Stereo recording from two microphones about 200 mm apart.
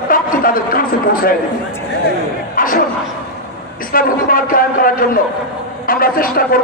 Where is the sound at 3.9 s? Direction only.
45° left (ahead or behind).